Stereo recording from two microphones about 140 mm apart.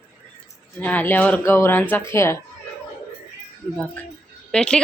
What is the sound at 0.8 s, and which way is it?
Speech, 10° left (ahead or behind).